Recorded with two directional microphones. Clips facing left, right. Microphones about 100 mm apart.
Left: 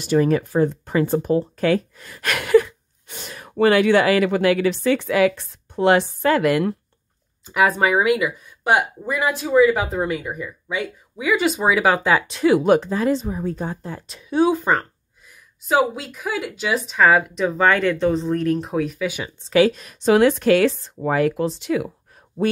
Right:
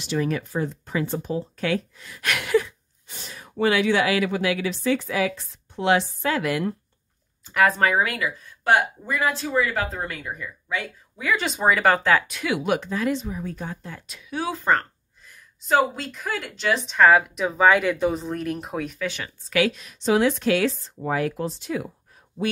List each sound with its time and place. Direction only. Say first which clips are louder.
0.0 s speech: left 7 dB; 50° left (ahead or behind)
1.6 s speech: left 6 dB; 45° left (ahead or behind); by 5.4 s 65° left (ahead or behind)
5.8 s speech: left 5 dB; 50° left (ahead or behind)
7.4 s speech: left 2 dB; 10° left (ahead or behind)
12.3 s speech: left 9 dB; 35° left (ahead or behind); by 19.3 s 10° left (ahead or behind)
19.5 s speech: left 6 dB; 40° left (ahead or behind); by 21.8 s 85° left
22.4 s speech: left 5 dB; 45° left (ahead or behind)